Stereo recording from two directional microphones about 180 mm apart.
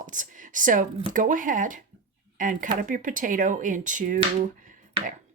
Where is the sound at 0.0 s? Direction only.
45° right (ahead or behind).